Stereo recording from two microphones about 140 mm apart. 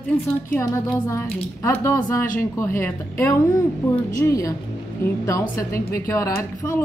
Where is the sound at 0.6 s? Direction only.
20° left (ahead or behind).